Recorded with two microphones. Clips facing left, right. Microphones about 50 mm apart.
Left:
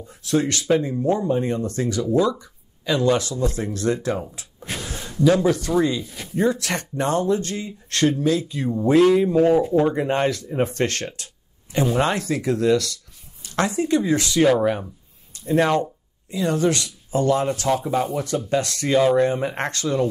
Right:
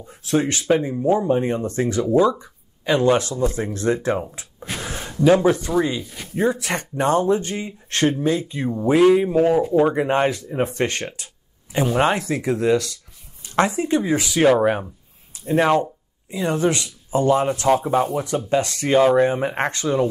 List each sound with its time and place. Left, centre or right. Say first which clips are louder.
0.1 s speech: right 1 dB; right